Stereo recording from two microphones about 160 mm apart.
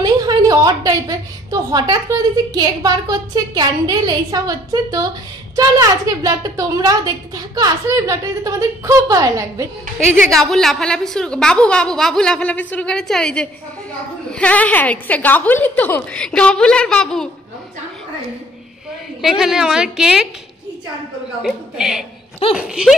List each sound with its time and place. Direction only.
0.0 s a woman's voice: 25° right (ahead or behind)
10.3 s a woman's voice: centre (ahead or behind)
19.2 s a woman's voice: 5° right (ahead or behind)
21.4 s a woman's voice: 5° right (ahead or behind)